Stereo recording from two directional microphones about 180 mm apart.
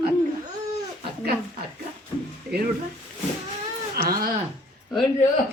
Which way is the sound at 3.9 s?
55° right (ahead or behind).